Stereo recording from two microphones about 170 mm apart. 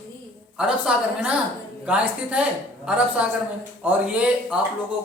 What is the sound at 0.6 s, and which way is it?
A woman's voice, 5° right (ahead or behind).